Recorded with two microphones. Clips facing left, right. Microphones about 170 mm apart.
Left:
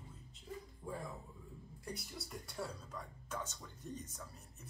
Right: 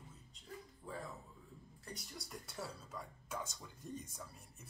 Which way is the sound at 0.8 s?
15° left (ahead or behind).